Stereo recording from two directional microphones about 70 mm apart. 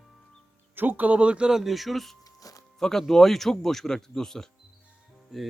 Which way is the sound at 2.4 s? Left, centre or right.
Left.